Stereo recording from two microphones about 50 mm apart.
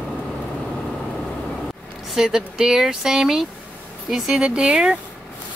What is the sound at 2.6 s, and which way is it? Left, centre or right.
A woman's voice, centre.